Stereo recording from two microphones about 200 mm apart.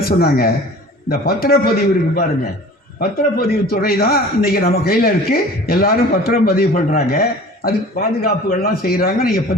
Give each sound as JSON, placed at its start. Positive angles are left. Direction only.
{"t": 0.0, "sound": "a man's voice", "side_deg": 50}